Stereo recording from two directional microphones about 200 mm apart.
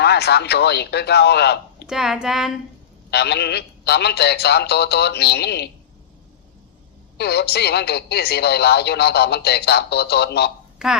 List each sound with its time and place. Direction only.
0.0 s a woman's voice: 55° left (ahead or behind)
1.9 s speech: centre (ahead or behind)
3.1 s a woman's voice: 55° left (ahead or behind)
7.2 s a woman's voice: 55° left (ahead or behind)
10.8 s speech: 5° right (ahead or behind)